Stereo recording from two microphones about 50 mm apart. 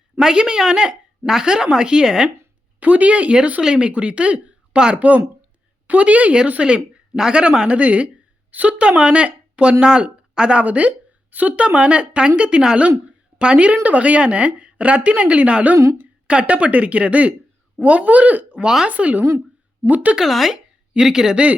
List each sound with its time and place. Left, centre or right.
0.2 s a woman's voice: centre
2.8 s a woman's voice: right
13.1 s a sound: right
13.8 s speech: right
20.1 s a woman's voice: centre